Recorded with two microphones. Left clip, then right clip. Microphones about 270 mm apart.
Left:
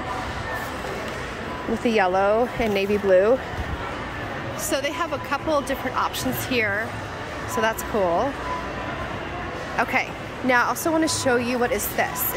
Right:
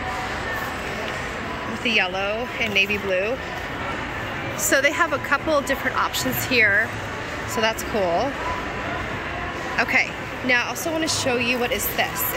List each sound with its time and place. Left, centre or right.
1.9 s speech: centre
4.6 s a woman's voice: centre
9.8 s a woman's voice: centre